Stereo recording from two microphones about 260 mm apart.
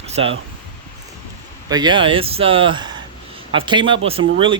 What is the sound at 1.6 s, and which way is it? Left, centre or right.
Speech, centre.